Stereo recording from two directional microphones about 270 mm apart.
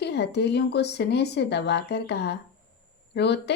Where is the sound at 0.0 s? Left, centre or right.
Left.